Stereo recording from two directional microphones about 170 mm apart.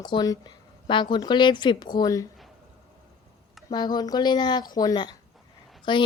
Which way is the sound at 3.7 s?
25° left (ahead or behind).